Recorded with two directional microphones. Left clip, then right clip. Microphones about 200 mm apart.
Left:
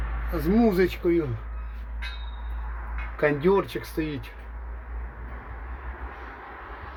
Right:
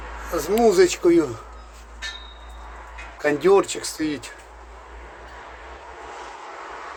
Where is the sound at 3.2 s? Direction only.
20° right (ahead or behind).